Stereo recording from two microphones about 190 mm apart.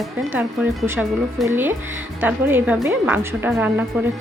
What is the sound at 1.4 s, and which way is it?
A woman's voice, 10° right (ahead or behind).